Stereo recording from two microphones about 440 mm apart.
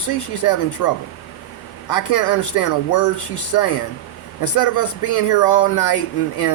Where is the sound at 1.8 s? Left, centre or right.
Left.